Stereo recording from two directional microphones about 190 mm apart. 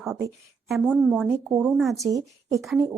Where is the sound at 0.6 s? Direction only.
Centre (ahead or behind).